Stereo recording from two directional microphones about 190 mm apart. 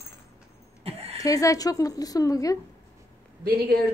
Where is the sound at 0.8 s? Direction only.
30° right (ahead or behind).